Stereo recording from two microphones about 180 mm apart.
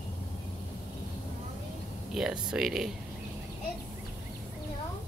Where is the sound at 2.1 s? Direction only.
5° right (ahead or behind).